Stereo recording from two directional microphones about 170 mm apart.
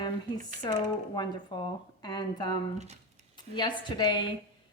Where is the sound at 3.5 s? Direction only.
25° left (ahead or behind).